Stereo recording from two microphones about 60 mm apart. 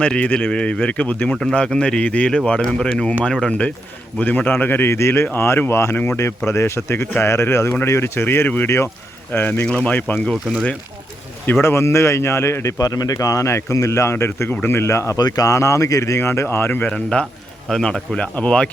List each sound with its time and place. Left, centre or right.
0.0 s speech: left
4.2 s speech: left
4.9 s a man's voice: left
5.2 s a man's voice: left
9.6 s speech: centre
11.6 s a man's voice: left
12.7 s speech: left
13.1 s a man's voice: left
15.1 s speech: left
15.5 s a man's voice: left
16.2 s a man's voice: left
16.9 s speech: centre